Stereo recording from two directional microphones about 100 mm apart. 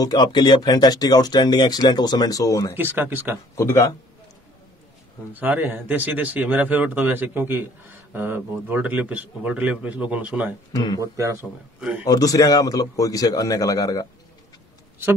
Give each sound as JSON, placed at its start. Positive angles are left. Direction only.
{"t": 0.0, "sound": "speech", "side_deg": 45}
{"t": 2.7, "sound": "speech", "side_deg": -20}
{"t": 3.5, "sound": "speech", "side_deg": 25}
{"t": 5.3, "sound": "speech", "side_deg": -20}
{"t": 10.7, "sound": "speech", "side_deg": 40}
{"t": 11.0, "sound": "speech", "side_deg": -30}
{"t": 12.0, "sound": "speech", "side_deg": 40}